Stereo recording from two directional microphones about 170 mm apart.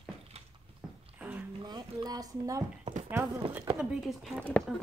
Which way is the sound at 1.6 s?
25° right (ahead or behind).